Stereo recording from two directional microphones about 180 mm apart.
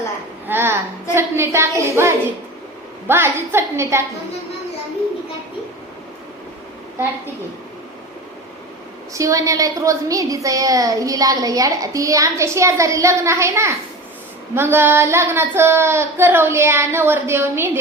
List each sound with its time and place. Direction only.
0.4 s a woman's voice: 10° right (ahead or behind)
9.1 s a woman's voice: 20° right (ahead or behind)